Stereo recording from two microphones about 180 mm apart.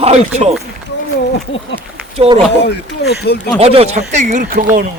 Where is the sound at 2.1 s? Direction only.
35° right (ahead or behind).